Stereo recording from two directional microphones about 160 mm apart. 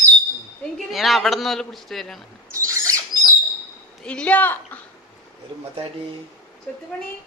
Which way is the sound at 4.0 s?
5° left (ahead or behind).